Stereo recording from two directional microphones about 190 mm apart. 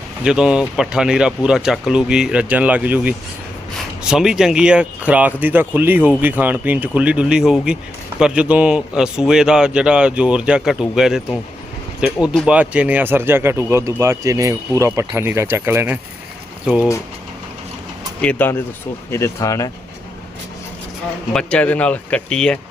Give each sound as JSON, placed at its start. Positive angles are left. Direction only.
{"t": 0.3, "sound": "speech", "side_deg": -5}
{"t": 18.2, "sound": "speech", "side_deg": 10}
{"t": 21.3, "sound": "speech", "side_deg": 5}